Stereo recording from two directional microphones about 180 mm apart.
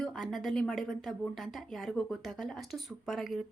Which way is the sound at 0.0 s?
Centre (ahead or behind).